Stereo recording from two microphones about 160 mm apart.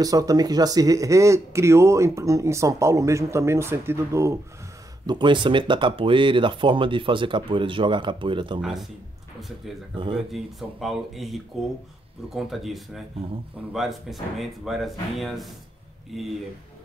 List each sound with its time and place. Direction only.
0.0 s speech: 20° right (ahead or behind)
5.0 s speech: 30° right (ahead or behind)
8.5 s speech: centre (ahead or behind)
9.9 s speech: 30° right (ahead or behind)
10.3 s speech: centre (ahead or behind)